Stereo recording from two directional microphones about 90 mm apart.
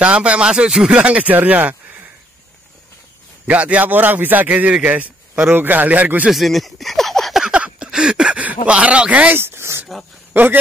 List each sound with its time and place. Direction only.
0.0 s a man's voice: 15° right (ahead or behind)
3.4 s a man's voice: 15° right (ahead or behind)
6.3 s speech: centre (ahead or behind)
7.4 s a sound: 10° right (ahead or behind)
9.4 s speech: 30° right (ahead or behind)